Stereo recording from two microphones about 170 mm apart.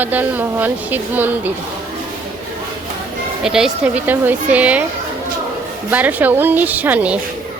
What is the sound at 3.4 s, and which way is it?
A woman's voice, 5° right (ahead or behind).